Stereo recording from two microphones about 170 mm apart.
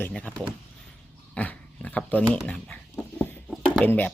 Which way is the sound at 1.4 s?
10° left (ahead or behind).